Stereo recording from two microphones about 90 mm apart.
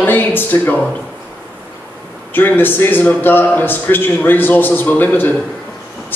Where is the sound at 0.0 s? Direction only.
20° left (ahead or behind).